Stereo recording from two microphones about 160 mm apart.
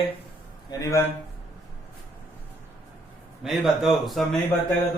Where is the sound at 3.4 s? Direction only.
Centre (ahead or behind).